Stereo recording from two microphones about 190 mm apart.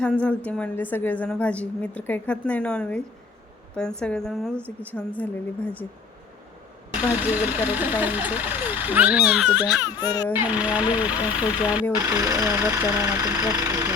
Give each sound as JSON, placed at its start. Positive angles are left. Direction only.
{"t": 0.0, "sound": "a woman's voice", "side_deg": 5}
{"t": 4.0, "sound": "a woman's voice", "side_deg": 5}
{"t": 4.5, "sound": "speech", "side_deg": -10}
{"t": 4.9, "sound": "a woman's voice", "side_deg": 10}
{"t": 6.9, "sound": "speech", "side_deg": -10}
{"t": 9.8, "sound": "a child's voice", "side_deg": 20}
{"t": 10.3, "sound": "speech", "side_deg": -10}